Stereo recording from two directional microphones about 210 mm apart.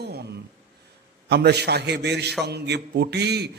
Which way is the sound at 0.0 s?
50° right (ahead or behind).